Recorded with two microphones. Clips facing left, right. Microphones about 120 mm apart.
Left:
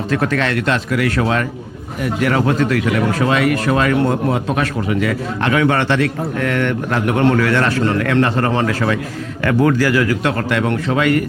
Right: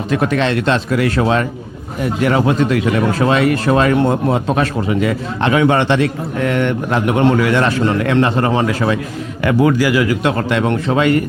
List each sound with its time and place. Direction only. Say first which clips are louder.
0.1 s speech: right 3 dB; 20° right (ahead or behind)